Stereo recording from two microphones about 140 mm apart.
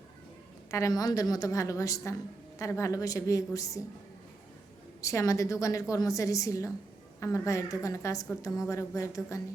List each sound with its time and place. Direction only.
0.7 s a woman's voice: 25° left (ahead or behind)
4.9 s a woman's voice: 25° left (ahead or behind)